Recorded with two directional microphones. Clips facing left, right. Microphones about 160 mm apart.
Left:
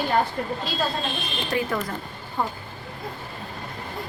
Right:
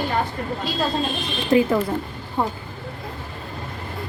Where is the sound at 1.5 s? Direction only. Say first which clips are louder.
Right 9 dB; 25° right (ahead or behind).